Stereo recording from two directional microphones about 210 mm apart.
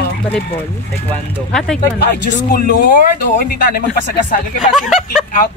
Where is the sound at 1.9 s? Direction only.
50° left (ahead or behind).